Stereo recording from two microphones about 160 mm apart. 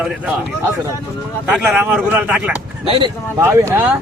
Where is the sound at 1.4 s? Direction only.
10° right (ahead or behind).